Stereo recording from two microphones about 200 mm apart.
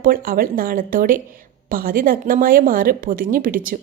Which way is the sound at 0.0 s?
45° right (ahead or behind).